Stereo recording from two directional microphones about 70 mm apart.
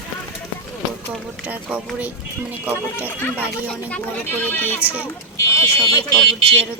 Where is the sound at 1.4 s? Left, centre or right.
Right.